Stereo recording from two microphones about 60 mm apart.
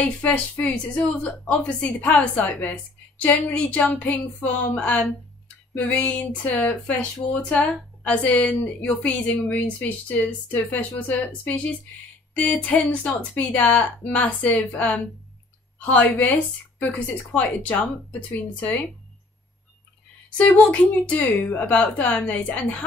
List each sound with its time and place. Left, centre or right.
0.2 s speech: left
12.6 s speech: left
20.2 s speech: left